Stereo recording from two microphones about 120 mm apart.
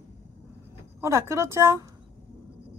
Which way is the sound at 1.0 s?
25° right (ahead or behind).